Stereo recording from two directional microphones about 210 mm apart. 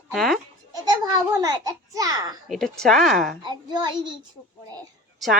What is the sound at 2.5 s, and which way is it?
Speech, centre (ahead or behind).